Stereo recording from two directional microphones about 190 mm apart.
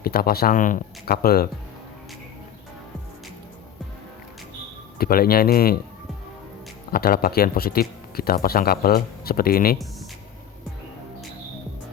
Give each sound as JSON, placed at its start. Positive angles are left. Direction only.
{"t": 0.0, "sound": "speech", "side_deg": 50}
{"t": 4.9, "sound": "speech", "side_deg": 50}
{"t": 6.9, "sound": "speech", "side_deg": 50}